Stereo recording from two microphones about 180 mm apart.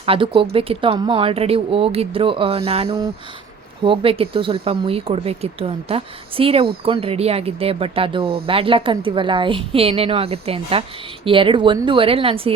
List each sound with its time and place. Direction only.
0.0 s speech: 30° right (ahead or behind)